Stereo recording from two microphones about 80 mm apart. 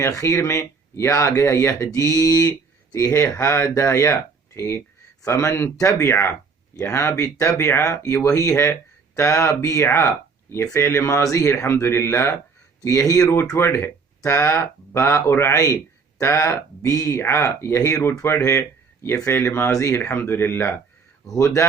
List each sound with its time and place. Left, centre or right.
0.2 s speech: left
2.9 s speech: left
13.6 s speech: left
21.2 s speech: left